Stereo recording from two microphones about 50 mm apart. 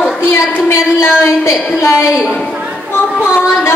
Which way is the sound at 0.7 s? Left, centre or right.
Left.